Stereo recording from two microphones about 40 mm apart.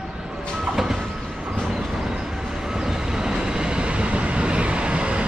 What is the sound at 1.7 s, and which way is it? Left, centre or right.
Train, centre.